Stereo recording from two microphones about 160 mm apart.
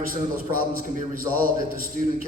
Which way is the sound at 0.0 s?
60° right (ahead or behind).